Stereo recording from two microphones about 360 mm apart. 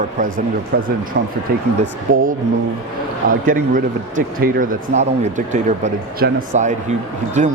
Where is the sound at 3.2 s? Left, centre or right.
Right.